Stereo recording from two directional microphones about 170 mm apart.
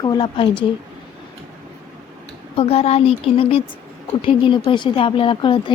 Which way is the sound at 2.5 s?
35° left (ahead or behind).